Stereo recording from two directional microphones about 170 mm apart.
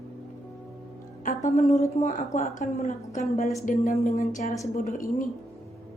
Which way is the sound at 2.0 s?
45° left (ahead or behind).